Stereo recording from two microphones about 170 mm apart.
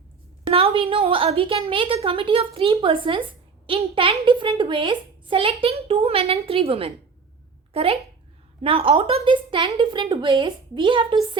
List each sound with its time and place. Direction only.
0.4 s a woman's voice: 35° right (ahead or behind)